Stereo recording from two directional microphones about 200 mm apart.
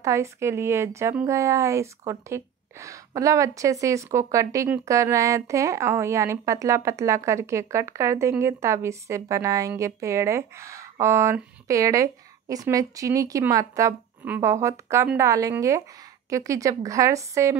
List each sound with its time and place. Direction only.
0.0 s speech: 15° right (ahead or behind)